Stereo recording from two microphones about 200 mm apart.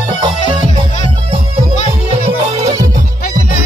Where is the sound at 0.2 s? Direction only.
25° right (ahead or behind).